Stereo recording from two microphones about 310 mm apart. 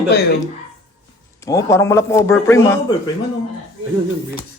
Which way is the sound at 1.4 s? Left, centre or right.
Centre.